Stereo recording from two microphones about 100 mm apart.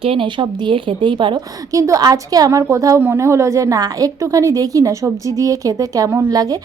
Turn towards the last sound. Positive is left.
turn(degrees=-40)  # may be behind; listen again after turning